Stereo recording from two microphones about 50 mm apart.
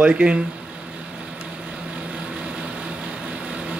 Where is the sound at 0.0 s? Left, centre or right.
Right.